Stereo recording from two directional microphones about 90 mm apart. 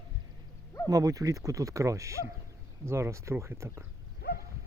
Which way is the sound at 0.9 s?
40° right (ahead or behind).